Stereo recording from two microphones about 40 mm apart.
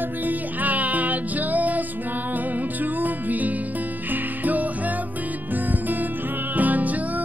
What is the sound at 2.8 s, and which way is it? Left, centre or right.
Music, right.